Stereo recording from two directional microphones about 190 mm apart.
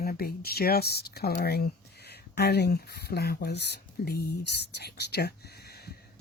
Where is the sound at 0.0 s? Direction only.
50° left (ahead or behind).